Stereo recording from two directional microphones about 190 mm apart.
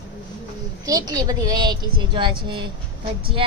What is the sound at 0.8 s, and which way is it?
A woman's voice, 20° right (ahead or behind).